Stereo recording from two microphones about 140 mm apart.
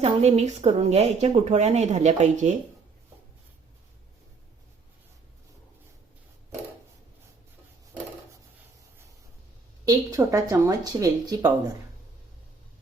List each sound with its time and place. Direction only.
0.0 s a woman's voice: 50° right (ahead or behind)
9.8 s speech: 25° right (ahead or behind)